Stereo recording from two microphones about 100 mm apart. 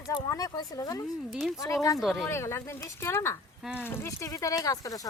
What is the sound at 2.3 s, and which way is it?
Speech, 25° left (ahead or behind).